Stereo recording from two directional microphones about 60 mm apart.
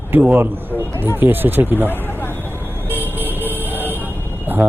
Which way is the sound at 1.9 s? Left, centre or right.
Left.